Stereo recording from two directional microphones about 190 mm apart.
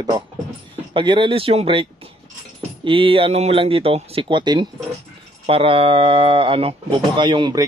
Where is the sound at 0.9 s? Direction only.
25° right (ahead or behind).